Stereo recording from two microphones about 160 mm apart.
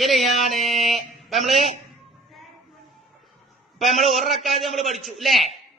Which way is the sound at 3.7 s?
Centre (ahead or behind).